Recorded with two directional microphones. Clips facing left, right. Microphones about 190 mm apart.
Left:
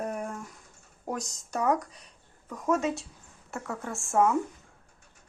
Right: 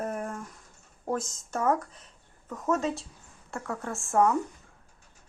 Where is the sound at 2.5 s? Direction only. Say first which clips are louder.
Left 1 dB; 10° left (ahead or behind).